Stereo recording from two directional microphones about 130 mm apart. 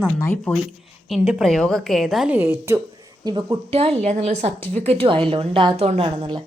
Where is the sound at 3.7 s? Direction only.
55° right (ahead or behind).